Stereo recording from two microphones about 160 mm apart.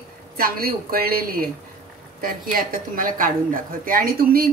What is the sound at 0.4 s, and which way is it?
A woman's voice, 70° right (ahead or behind).